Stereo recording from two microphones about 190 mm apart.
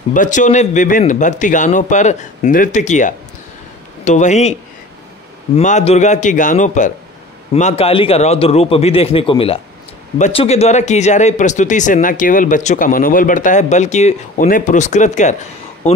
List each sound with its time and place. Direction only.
0.1 s speech: 40° left (ahead or behind)
5.6 s speech: 40° left (ahead or behind)